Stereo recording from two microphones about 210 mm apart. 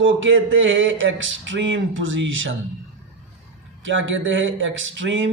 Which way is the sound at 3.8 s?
65° right (ahead or behind).